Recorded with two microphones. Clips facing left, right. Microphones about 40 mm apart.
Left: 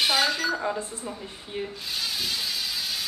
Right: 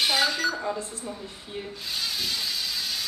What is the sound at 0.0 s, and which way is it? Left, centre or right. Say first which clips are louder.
Chink: even; centre.